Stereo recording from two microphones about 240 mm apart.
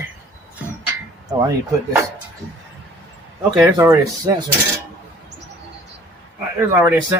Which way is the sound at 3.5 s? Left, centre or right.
Centre.